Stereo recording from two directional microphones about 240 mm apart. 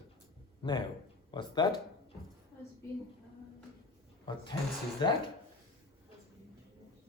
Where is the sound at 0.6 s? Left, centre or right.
Centre.